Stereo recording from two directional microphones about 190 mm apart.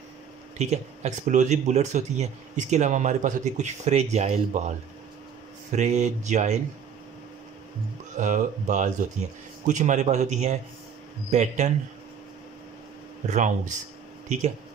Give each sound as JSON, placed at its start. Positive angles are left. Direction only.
{"t": 0.6, "sound": "speech", "side_deg": -35}
{"t": 8.2, "sound": "speech", "side_deg": -40}
{"t": 13.3, "sound": "speech", "side_deg": -40}